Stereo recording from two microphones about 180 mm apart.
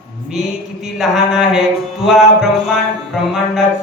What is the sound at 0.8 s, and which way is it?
Speech, centre (ahead or behind).